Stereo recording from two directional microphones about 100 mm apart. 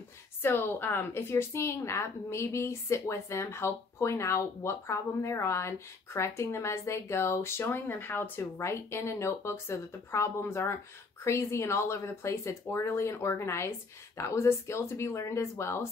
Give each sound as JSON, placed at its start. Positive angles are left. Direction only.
{"t": 0.4, "sound": "a woman's voice", "side_deg": 20}